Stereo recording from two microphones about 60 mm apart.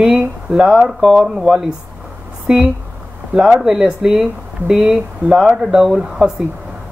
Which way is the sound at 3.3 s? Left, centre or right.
Centre.